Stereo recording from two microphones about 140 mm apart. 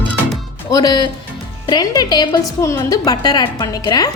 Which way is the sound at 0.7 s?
30° left (ahead or behind).